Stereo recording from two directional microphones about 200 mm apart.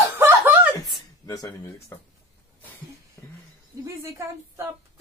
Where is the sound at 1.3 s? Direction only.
15° left (ahead or behind).